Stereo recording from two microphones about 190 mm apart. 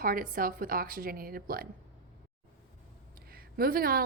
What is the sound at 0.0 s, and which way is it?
A woman's voice, 45° right (ahead or behind).